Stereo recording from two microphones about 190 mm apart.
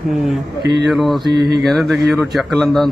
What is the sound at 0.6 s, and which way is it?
Speech, 60° right (ahead or behind).